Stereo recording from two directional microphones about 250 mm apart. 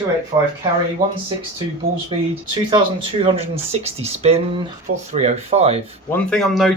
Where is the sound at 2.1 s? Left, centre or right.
Centre.